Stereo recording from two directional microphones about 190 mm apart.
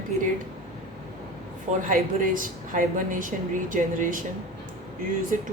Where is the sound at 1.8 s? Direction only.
45° right (ahead or behind).